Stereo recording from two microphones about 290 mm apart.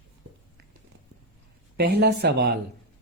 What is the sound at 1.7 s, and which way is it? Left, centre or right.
Speech, right.